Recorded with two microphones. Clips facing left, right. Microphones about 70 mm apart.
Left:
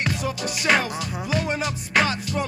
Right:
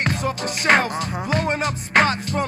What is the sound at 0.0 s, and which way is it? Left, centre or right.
Music, right.